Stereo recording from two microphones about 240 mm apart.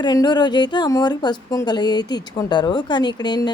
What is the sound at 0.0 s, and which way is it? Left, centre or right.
Speech, centre.